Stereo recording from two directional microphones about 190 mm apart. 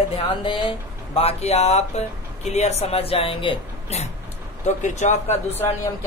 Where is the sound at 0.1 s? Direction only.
25° left (ahead or behind).